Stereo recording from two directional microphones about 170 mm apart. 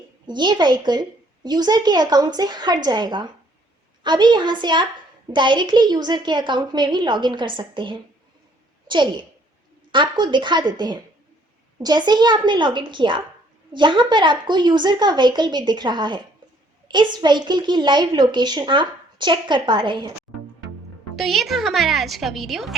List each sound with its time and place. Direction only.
0.3 s a woman's voice: 25° right (ahead or behind)
21.2 s a woman's voice: centre (ahead or behind)